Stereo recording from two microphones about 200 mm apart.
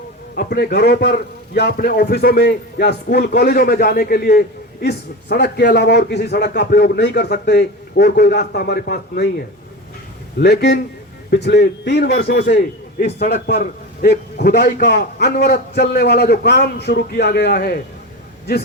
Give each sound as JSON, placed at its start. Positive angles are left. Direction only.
{"t": 0.3, "sound": "a man's voice", "side_deg": 50}
{"t": 10.4, "sound": "a man's voice", "side_deg": 55}